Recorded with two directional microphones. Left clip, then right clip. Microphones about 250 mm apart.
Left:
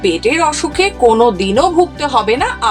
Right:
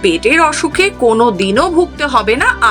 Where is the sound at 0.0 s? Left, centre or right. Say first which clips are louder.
Right 3 dB; centre.